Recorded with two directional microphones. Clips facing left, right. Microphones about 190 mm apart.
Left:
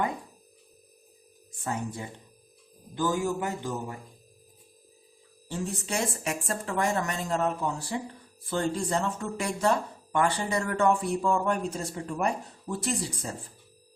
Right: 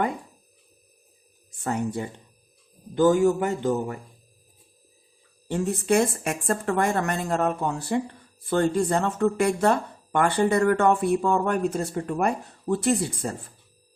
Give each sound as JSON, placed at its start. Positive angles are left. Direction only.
{"t": 1.6, "sound": "speech", "side_deg": -65}
{"t": 5.5, "sound": "speech", "side_deg": -55}